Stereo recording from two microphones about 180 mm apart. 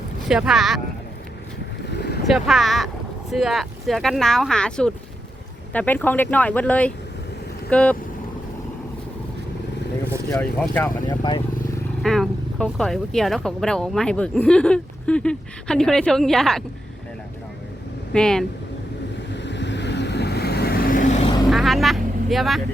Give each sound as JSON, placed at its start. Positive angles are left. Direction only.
{"t": 0.3, "sound": "speech", "side_deg": 0}
{"t": 1.9, "sound": "boat", "side_deg": 65}
{"t": 2.2, "sound": "speech", "side_deg": 0}
{"t": 10.3, "sound": "speech", "side_deg": 10}
{"t": 11.1, "sound": "speech", "side_deg": 25}
{"t": 12.0, "sound": "speech", "side_deg": 0}
{"t": 18.1, "sound": "speech", "side_deg": 5}
{"t": 19.3, "sound": "vehicle", "side_deg": 75}
{"t": 21.5, "sound": "vehicle", "side_deg": 0}